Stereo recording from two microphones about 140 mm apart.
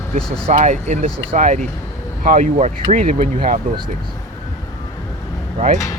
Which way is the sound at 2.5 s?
50° right (ahead or behind).